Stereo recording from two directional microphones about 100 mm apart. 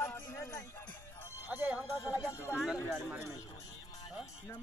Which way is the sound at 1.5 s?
15° right (ahead or behind).